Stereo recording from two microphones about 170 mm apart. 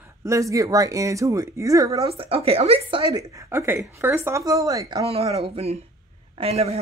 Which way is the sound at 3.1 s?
20° right (ahead or behind).